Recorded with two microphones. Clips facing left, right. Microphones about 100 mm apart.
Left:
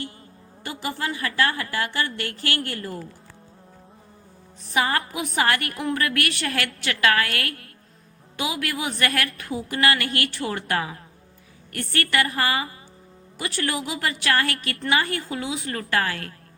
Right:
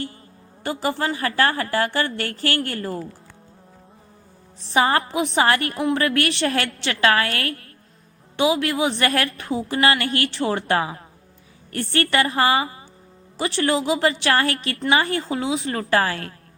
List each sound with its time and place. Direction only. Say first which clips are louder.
0.6 s a woman's voice: right 6 dB; 35° right (ahead or behind)
4.6 s a woman's voice: right 5 dB; 30° right (ahead or behind)